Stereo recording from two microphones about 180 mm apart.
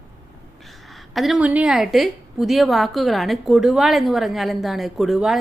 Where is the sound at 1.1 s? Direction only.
Centre (ahead or behind).